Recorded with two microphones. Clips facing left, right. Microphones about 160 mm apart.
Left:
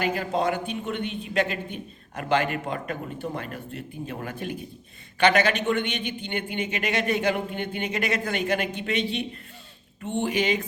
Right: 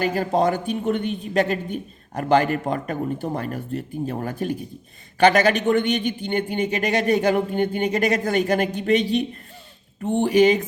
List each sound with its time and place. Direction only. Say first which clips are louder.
0.0 s speech: right 5 dB; 40° right (ahead or behind)